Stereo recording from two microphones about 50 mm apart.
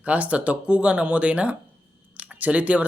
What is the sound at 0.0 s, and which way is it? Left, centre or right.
Speech, right.